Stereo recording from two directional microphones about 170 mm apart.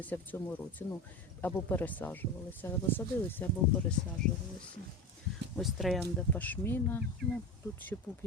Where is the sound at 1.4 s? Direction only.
10° left (ahead or behind).